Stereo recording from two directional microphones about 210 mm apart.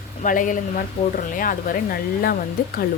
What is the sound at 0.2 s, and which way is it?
Speech, 40° left (ahead or behind).